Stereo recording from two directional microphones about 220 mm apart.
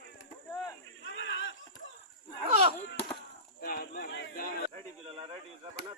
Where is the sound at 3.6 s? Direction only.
40° left (ahead or behind).